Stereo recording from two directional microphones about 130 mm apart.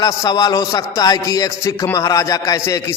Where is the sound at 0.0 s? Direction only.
30° left (ahead or behind).